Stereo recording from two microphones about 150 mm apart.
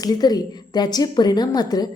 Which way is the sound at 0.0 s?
25° left (ahead or behind).